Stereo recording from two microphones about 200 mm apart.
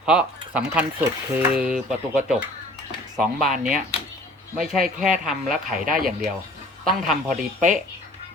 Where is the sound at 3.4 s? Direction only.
40° right (ahead or behind).